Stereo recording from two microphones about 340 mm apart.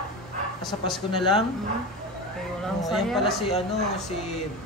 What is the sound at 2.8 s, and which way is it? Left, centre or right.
Speech, centre.